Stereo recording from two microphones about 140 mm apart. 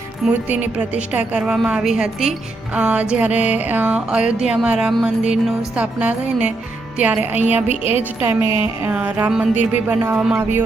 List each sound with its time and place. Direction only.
0.3 s music: 10° right (ahead or behind)
7.7 s a woman's voice: 50° left (ahead or behind)
8.2 s music: 15° right (ahead or behind)